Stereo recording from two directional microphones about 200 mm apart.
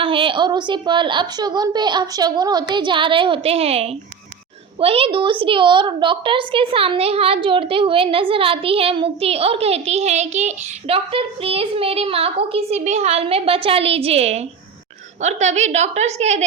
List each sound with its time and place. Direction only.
0.0 s a woman's voice: 25° right (ahead or behind)